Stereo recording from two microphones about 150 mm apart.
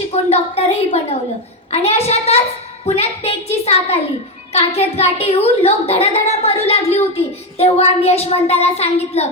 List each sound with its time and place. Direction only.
0.1 s a woman's voice: 45° left (ahead or behind)